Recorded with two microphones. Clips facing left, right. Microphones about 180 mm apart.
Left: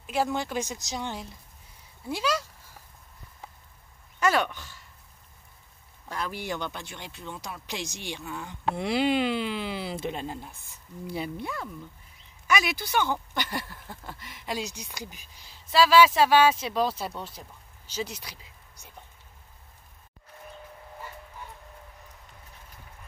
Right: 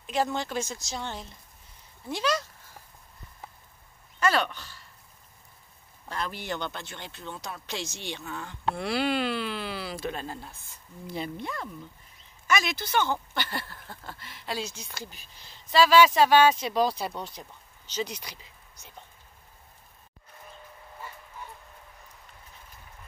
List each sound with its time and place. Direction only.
0.0 s speech: 10° left (ahead or behind)
4.2 s speech: 15° left (ahead or behind)
6.0 s speech: 10° left (ahead or behind)